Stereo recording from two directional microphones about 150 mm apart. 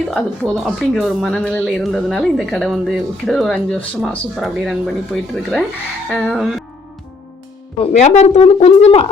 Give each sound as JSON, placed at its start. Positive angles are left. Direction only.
{"t": 0.1, "sound": "speech", "side_deg": 0}
{"t": 7.8, "sound": "speech", "side_deg": 50}